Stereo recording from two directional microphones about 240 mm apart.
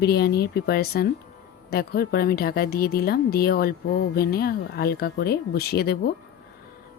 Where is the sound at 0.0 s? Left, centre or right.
Left.